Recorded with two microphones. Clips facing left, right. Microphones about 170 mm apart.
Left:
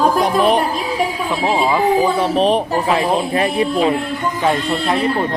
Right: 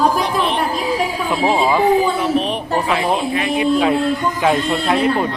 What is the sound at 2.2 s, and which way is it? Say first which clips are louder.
Speech: left 4 dB; 35° left (ahead or behind).